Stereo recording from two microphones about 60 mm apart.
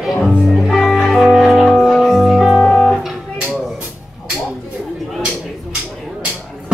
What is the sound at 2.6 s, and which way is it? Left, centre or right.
Music, centre.